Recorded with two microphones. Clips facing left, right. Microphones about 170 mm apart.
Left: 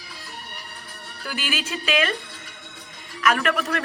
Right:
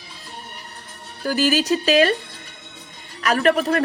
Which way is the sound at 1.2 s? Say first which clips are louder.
Right 11 dB; 40° right (ahead or behind).